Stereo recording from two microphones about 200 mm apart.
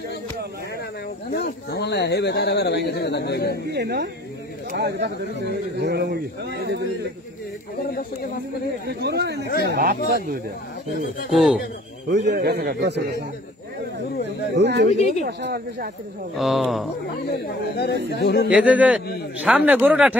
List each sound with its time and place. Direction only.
1.3 s speech: 55° left (ahead or behind)
3.6 s a man's voice: 55° right (ahead or behind)
8.8 s a man's voice: 60° right (ahead or behind)
11.3 s speech: centre (ahead or behind)
12.1 s a man's voice: 55° right (ahead or behind)
14.5 s speech: 60° right (ahead or behind)
14.9 s speech: 35° left (ahead or behind)
15.2 s speech: 55° right (ahead or behind)
16.3 s speech: centre (ahead or behind)
17.3 s speech: 55° left (ahead or behind)
18.5 s speech: 5° right (ahead or behind)